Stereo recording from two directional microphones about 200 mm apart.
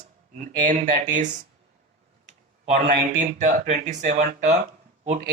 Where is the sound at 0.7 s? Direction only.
40° right (ahead or behind).